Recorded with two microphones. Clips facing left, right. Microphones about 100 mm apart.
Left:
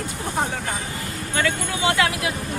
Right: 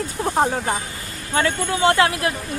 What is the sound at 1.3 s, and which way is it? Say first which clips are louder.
Speech: right 4 dB; 35° right (ahead or behind).